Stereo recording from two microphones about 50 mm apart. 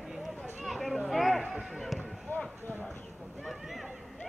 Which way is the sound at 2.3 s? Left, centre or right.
Left.